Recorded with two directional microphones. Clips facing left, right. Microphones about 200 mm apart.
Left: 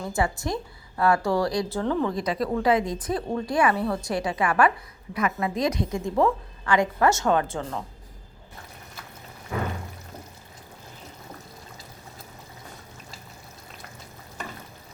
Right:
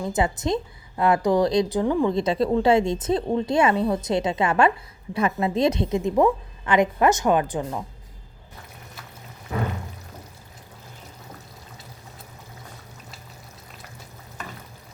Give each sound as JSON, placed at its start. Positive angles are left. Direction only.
{"t": 0.0, "sound": "a woman's voice", "side_deg": -20}
{"t": 2.1, "sound": "a woman's voice", "side_deg": -25}